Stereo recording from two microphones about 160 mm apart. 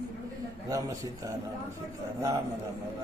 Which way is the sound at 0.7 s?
20° right (ahead or behind).